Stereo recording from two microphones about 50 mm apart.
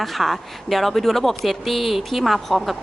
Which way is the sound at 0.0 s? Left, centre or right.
Centre.